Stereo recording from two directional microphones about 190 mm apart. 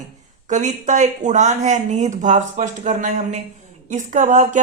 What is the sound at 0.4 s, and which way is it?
Speech, 40° right (ahead or behind).